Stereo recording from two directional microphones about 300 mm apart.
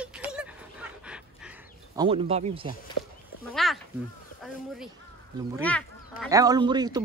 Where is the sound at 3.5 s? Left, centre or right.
Centre.